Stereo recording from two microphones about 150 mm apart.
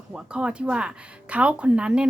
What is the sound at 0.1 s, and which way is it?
Speech, 10° right (ahead or behind).